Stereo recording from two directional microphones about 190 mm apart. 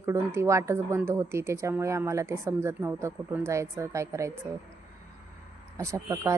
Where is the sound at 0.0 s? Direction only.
15° right (ahead or behind).